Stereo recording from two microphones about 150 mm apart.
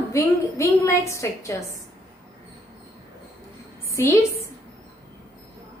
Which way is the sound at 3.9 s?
20° left (ahead or behind).